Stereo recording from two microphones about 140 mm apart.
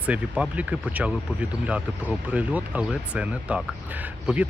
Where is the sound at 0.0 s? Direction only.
10° right (ahead or behind).